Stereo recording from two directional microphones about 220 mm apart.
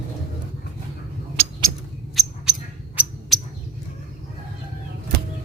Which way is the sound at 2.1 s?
Centre (ahead or behind).